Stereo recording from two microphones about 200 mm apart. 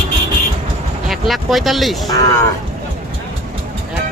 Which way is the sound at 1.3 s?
Centre (ahead or behind).